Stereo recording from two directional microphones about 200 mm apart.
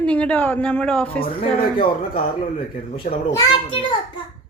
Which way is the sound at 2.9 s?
25° left (ahead or behind).